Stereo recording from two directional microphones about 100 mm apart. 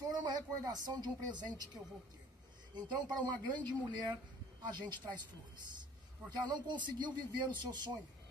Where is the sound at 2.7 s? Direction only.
50° right (ahead or behind).